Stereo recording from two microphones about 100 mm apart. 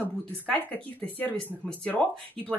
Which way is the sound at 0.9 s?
15° left (ahead or behind).